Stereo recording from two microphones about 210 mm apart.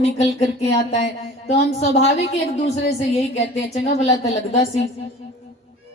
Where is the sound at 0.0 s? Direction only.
30° left (ahead or behind).